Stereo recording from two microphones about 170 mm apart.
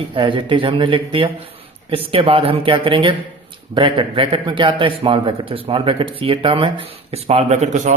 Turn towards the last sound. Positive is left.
turn(degrees=-40)  # may be behind; listen again after turning